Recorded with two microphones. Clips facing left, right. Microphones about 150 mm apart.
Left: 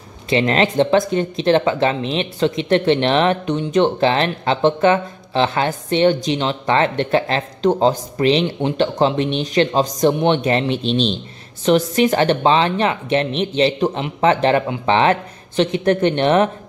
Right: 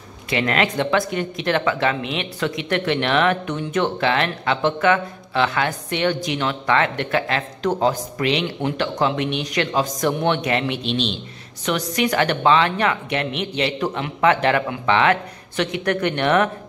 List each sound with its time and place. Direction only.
0.3 s speech: 30° left (ahead or behind)